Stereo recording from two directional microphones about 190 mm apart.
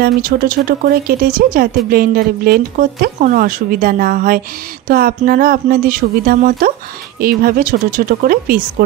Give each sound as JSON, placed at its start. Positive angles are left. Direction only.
{"t": 0.0, "sound": "speech", "side_deg": -50}